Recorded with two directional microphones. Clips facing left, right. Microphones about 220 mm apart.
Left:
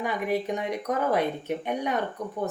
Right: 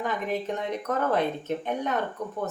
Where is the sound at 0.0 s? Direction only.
10° left (ahead or behind).